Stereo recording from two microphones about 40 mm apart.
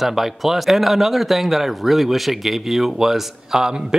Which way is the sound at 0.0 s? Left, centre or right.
Centre.